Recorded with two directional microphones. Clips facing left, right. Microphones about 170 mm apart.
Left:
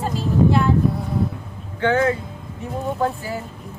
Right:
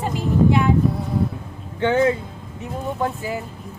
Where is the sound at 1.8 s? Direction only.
20° right (ahead or behind).